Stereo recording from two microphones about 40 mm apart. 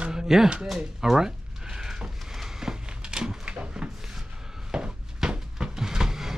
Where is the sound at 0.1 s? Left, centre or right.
Centre.